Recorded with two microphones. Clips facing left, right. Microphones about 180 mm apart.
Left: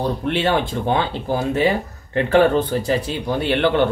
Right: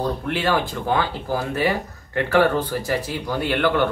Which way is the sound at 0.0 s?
25° left (ahead or behind).